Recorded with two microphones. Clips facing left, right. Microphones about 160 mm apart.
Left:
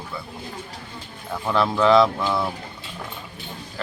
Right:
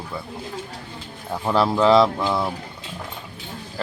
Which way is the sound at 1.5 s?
30° right (ahead or behind).